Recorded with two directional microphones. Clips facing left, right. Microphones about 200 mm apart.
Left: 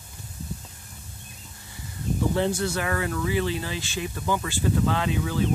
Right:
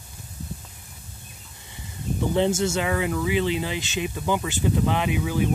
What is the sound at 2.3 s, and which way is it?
Speech, 25° right (ahead or behind).